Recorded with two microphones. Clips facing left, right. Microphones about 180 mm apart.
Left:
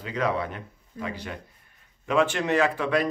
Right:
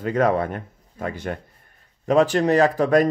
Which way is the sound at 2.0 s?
40° right (ahead or behind).